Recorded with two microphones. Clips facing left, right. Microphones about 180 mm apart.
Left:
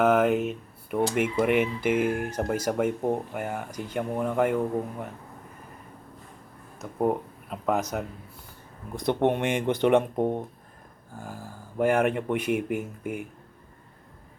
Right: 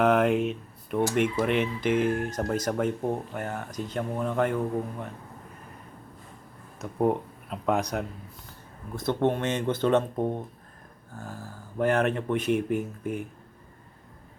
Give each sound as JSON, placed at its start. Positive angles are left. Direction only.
{"t": 0.0, "sound": "speech", "side_deg": 0}
{"t": 6.7, "sound": "speech", "side_deg": 0}
{"t": 9.0, "sound": "speech", "side_deg": 15}
{"t": 11.8, "sound": "speech", "side_deg": 10}